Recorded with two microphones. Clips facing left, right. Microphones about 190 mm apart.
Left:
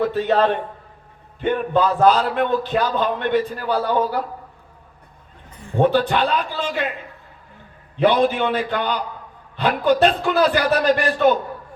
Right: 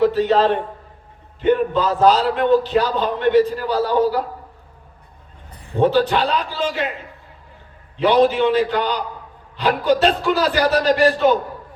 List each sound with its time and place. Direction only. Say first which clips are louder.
0.0 s a man's voice: right 3 dB; 55° left (ahead or behind)
5.7 s a man's voice: right 1 dB; 55° left (ahead or behind)
7.9 s a man's voice: right 2 dB; 55° left (ahead or behind)